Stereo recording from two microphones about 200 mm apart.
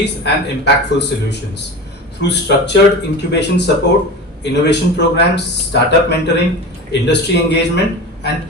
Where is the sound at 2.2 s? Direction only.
60° left (ahead or behind).